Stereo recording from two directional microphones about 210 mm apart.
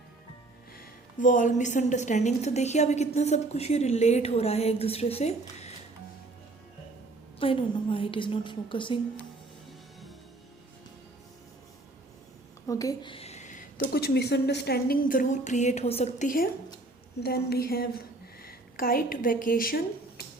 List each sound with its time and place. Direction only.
0.8 s a woman's voice: 40° left (ahead or behind)
7.3 s a woman's voice: 25° left (ahead or behind)
12.6 s a sound: 15° left (ahead or behind); by 13.8 s 40° left (ahead or behind)
13.9 s a woman's voice: 50° left (ahead or behind)